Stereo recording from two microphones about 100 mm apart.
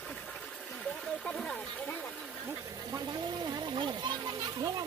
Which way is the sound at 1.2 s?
10° left (ahead or behind).